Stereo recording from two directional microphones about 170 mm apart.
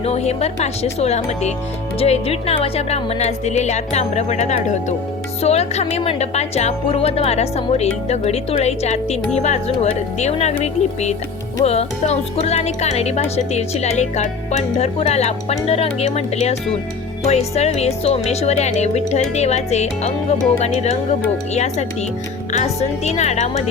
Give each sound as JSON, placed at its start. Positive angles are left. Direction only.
{"t": 0.0, "sound": "speech", "side_deg": 40}
{"t": 21.5, "sound": "speech", "side_deg": 40}